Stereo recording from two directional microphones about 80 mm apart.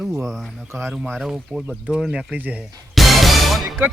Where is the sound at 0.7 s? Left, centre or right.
Right.